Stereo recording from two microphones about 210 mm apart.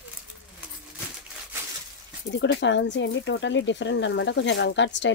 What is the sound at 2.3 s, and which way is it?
Speech, 55° left (ahead or behind).